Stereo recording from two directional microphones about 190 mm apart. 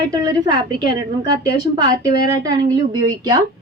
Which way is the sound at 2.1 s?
50° left (ahead or behind).